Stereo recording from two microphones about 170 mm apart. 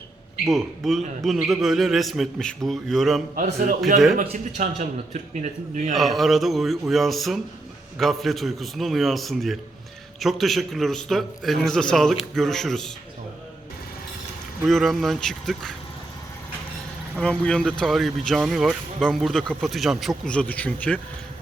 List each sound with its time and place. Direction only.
0.5 s speech: centre (ahead or behind)
4.2 s a man's voice: 45° right (ahead or behind)
5.9 s speech: centre (ahead or behind)
14.7 s speech: centre (ahead or behind)
17.2 s speech: 5° left (ahead or behind)